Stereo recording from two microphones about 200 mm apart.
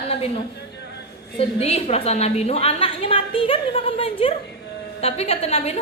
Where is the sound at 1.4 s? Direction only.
30° left (ahead or behind).